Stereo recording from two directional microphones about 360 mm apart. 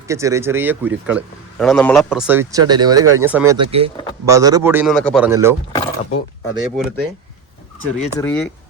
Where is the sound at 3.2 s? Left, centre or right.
Centre.